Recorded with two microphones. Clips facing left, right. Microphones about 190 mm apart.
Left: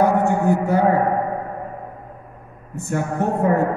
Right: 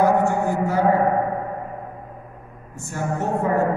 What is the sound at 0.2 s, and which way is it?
Speech, 60° left (ahead or behind).